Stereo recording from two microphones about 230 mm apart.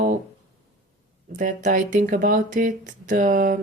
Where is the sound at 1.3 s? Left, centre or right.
Right.